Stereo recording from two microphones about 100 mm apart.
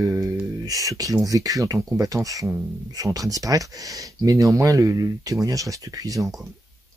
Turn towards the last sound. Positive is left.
turn(degrees=-35)  # may be behind; listen again after turning